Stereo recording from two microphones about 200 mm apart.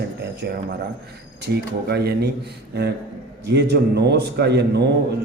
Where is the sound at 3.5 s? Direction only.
55° right (ahead or behind).